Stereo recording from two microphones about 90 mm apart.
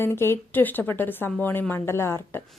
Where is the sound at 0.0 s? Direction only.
25° left (ahead or behind).